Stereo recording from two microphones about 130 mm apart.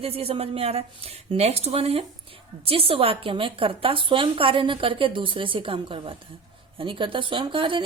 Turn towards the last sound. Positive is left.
turn(degrees=-40)  # may be behind; listen again after turning